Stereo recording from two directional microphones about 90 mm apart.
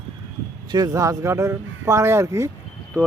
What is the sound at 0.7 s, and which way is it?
Speech, 45° right (ahead or behind).